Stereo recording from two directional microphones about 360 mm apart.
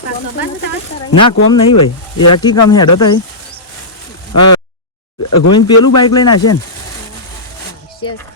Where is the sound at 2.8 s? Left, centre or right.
Left.